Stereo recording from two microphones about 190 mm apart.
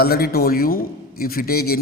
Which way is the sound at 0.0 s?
55° left (ahead or behind).